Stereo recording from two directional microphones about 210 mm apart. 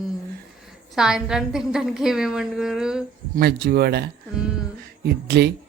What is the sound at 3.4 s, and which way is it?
A man's voice, 50° right (ahead or behind).